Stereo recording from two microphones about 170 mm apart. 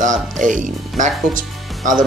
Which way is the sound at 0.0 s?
50° right (ahead or behind).